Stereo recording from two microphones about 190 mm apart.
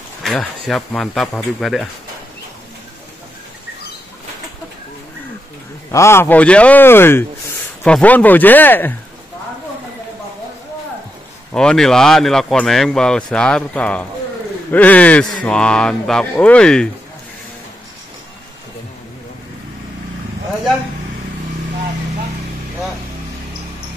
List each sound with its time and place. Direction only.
0.2 s speech: centre (ahead or behind)
5.9 s speech: 15° left (ahead or behind)
11.5 s speech: 5° left (ahead or behind)